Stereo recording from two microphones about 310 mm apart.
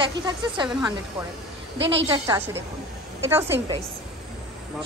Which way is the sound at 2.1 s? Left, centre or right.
Centre.